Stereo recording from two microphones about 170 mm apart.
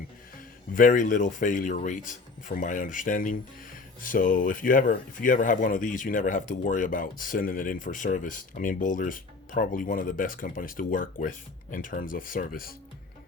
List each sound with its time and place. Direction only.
0.7 s speech: 50° left (ahead or behind)